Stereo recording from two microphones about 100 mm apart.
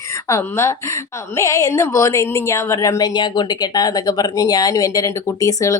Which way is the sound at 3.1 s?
45° left (ahead or behind).